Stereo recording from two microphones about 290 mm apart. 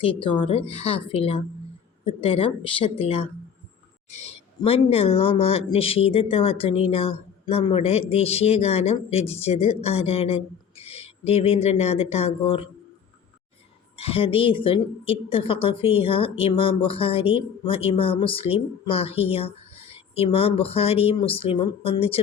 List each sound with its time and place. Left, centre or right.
0.0 s speech: centre
13.9 s speech: centre